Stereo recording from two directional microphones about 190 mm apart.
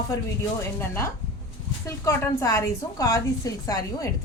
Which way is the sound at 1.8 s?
15° left (ahead or behind).